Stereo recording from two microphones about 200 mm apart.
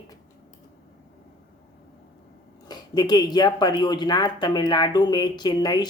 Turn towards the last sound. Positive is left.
turn(degrees=20)  # may be behind; listen again after turning